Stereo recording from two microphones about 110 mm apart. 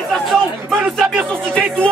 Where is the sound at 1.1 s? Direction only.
15° right (ahead or behind).